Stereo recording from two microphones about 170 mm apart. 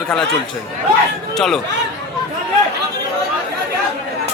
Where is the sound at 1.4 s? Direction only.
5° left (ahead or behind).